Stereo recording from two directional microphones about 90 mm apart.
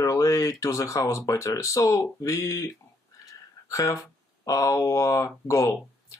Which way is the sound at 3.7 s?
35° left (ahead or behind).